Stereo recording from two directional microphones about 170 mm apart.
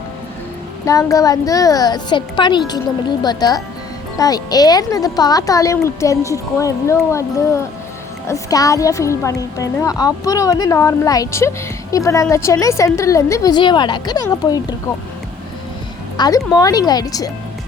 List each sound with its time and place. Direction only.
0.9 s a woman's voice: 20° left (ahead or behind)
16.1 s a woman's voice: 25° left (ahead or behind)